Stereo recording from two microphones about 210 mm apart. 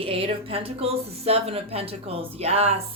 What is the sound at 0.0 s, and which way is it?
A woman's voice, 25° right (ahead or behind).